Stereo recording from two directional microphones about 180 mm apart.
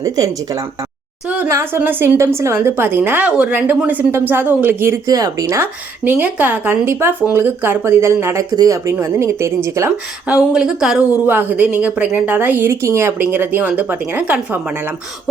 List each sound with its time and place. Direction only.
0.0 s speech: 20° right (ahead or behind)